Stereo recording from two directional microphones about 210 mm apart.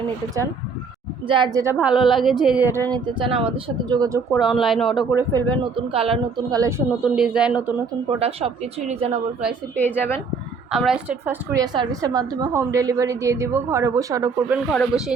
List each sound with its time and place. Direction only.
1.3 s a woman's voice: 20° right (ahead or behind)
2.9 s speech: 25° right (ahead or behind)
4.4 s speech: centre (ahead or behind)
5.1 s speech: 20° right (ahead or behind)
6.6 s speech: 15° right (ahead or behind)
8.2 s speech: 30° right (ahead or behind)
9.7 s speech: 10° left (ahead or behind)
10.7 s a woman's voice: centre (ahead or behind)
14.7 s speech: centre (ahead or behind)